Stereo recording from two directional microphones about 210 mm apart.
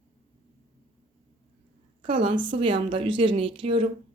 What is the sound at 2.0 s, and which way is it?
Speech, 25° right (ahead or behind).